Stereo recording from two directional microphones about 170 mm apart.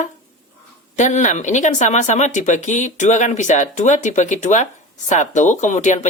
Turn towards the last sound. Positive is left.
turn(degrees=45)  # may be behind; listen again after turning